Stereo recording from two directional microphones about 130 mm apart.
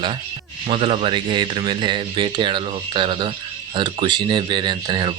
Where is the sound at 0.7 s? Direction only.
50° right (ahead or behind).